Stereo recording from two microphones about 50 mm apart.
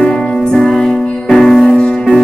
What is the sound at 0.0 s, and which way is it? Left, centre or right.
Music, centre.